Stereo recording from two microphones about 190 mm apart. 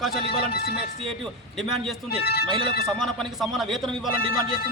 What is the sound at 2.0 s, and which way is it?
Speech, 55° left (ahead or behind).